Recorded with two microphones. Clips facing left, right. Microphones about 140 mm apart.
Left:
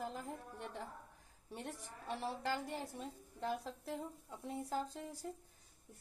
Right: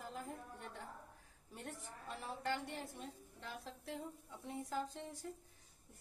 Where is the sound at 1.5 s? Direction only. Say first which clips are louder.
Left 3 dB; 85° left.